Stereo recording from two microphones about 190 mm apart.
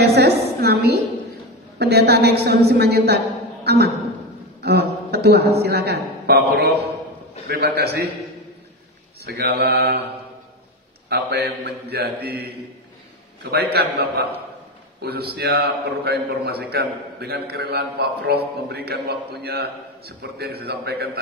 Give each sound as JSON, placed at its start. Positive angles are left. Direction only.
{"t": 0.0, "sound": "a sound", "side_deg": -60}
{"t": 1.8, "sound": "a man's voice", "side_deg": -55}
{"t": 4.6, "sound": "a sound", "side_deg": -55}
{"t": 5.6, "sound": "a man's voice", "side_deg": -60}
{"t": 9.2, "sound": "a man's voice", "side_deg": -55}
{"t": 11.1, "sound": "a man's voice", "side_deg": -60}